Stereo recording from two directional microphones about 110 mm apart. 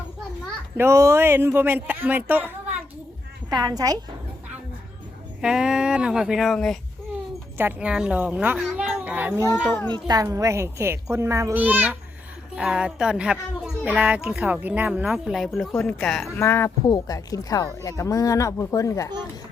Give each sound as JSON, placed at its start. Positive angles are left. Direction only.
{"t": 0.8, "sound": "speech", "side_deg": -25}
{"t": 3.5, "sound": "a woman's voice", "side_deg": -35}
{"t": 5.4, "sound": "a child's voice", "side_deg": -5}
{"t": 7.6, "sound": "speech", "side_deg": -10}
{"t": 9.9, "sound": "speech", "side_deg": -35}
{"t": 11.5, "sound": "a child's voice", "side_deg": -15}
{"t": 15.7, "sound": "speech", "side_deg": 20}
{"t": 16.0, "sound": "speech", "side_deg": 5}
{"t": 16.4, "sound": "speech", "side_deg": 25}
{"t": 16.8, "sound": "speech", "side_deg": 35}